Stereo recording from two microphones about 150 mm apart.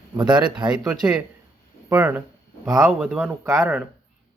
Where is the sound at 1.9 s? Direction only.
15° right (ahead or behind).